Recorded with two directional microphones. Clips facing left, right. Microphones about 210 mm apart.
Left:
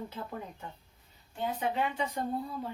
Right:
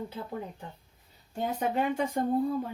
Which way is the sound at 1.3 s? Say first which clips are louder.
Right 3 dB; 45° right (ahead or behind).